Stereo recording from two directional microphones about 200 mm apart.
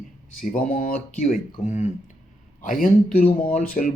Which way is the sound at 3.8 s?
40° left (ahead or behind).